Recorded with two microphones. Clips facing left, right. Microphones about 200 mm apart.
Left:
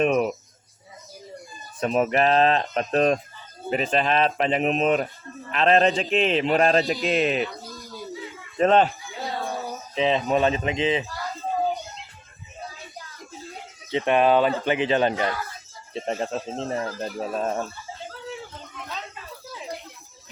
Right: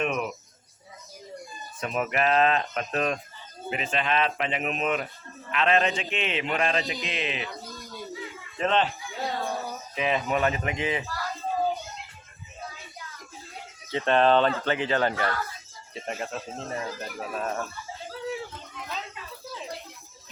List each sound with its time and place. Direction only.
0.0 s speech: 35° left (ahead or behind)
1.8 s speech: 35° left (ahead or behind)
6.8 s speech: centre (ahead or behind)
7.1 s speech: 45° left (ahead or behind)
7.4 s a sound: centre (ahead or behind)
8.5 s speech: 40° left (ahead or behind)
8.9 s a sound: centre (ahead or behind)
9.9 s speech: 25° left (ahead or behind)
13.9 s speech: 15° left (ahead or behind)
15.9 s speech: 35° left (ahead or behind)
18.9 s a sound: centre (ahead or behind)